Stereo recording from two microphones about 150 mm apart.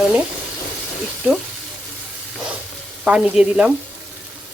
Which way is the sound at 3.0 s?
5° right (ahead or behind).